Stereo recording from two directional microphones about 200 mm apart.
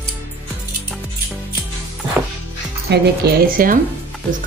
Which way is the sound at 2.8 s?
55° right (ahead or behind).